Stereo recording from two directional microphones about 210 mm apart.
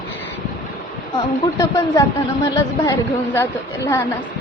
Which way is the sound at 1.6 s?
15° left (ahead or behind).